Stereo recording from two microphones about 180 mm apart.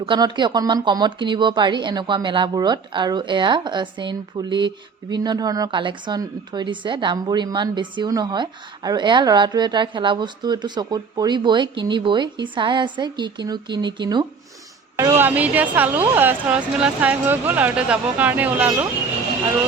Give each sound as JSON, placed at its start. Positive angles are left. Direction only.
{"t": 0.0, "sound": "speech", "side_deg": -25}
{"t": 14.9, "sound": "speech", "side_deg": -15}